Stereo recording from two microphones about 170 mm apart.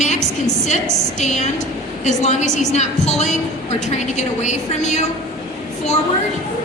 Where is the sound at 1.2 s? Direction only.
45° left (ahead or behind).